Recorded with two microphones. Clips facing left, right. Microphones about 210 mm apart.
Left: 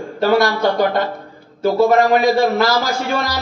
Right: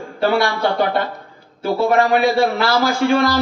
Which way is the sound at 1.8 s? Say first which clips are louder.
Left 2 dB; 40° left (ahead or behind).